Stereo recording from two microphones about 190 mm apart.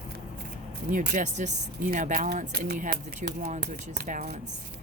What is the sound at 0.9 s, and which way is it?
Speech, 45° right (ahead or behind).